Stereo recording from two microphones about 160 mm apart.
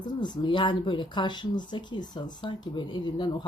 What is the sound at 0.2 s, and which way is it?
Speech, 30° left (ahead or behind).